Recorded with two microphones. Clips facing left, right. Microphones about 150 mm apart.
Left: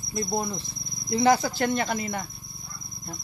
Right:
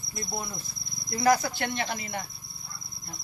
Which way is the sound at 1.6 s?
45° left (ahead or behind).